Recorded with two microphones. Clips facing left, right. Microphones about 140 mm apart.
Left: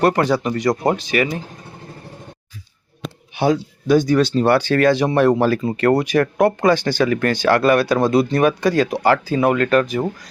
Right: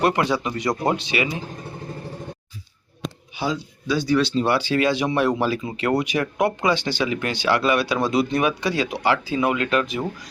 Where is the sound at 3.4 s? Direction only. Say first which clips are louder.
Left 8 dB; 55° left (ahead or behind).